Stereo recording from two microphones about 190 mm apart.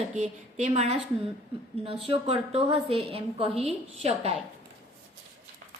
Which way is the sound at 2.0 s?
30° right (ahead or behind).